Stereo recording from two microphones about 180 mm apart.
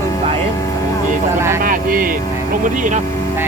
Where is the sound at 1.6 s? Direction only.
50° right (ahead or behind).